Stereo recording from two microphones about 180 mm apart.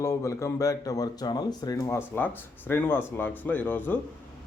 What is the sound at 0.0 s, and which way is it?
Speech, 15° left (ahead or behind).